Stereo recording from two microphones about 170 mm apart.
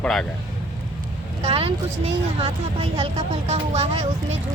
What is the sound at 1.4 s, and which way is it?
Speech, 35° right (ahead or behind).